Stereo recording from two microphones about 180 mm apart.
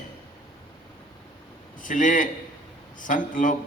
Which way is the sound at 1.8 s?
45° left (ahead or behind).